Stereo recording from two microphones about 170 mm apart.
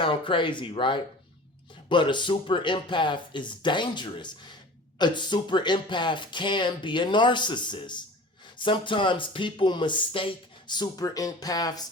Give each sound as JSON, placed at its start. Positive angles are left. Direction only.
{"t": 0.0, "sound": "speech", "side_deg": 30}